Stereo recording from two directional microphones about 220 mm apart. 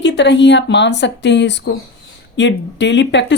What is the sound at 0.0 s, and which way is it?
Speech, 55° left (ahead or behind).